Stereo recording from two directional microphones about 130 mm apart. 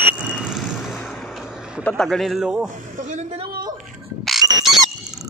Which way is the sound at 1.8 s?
5° left (ahead or behind).